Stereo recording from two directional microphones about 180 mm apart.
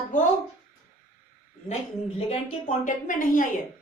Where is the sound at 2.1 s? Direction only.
30° left (ahead or behind).